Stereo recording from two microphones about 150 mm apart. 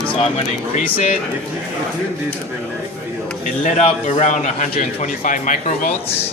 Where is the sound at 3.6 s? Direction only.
55° left (ahead or behind).